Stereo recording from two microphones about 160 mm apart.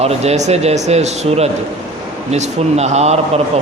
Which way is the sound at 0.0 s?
40° right (ahead or behind).